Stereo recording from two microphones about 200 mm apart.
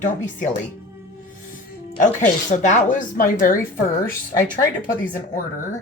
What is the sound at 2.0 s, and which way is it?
A woman's voice, 40° left (ahead or behind).